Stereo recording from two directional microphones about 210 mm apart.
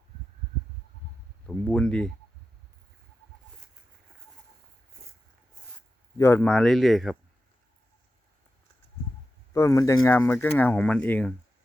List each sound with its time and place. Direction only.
1.5 s speech: 5° left (ahead or behind)
6.1 s speech: 10° left (ahead or behind)
9.5 s speech: 15° left (ahead or behind)